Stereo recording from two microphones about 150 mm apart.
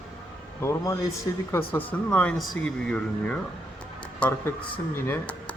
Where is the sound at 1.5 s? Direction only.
15° left (ahead or behind).